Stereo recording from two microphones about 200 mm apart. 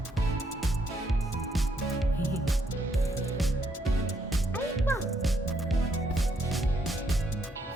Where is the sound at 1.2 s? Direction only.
Centre (ahead or behind).